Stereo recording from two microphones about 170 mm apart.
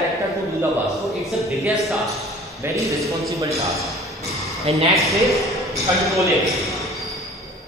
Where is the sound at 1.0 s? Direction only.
Centre (ahead or behind).